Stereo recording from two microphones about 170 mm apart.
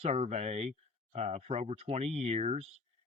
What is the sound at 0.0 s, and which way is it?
Speech, 40° right (ahead or behind).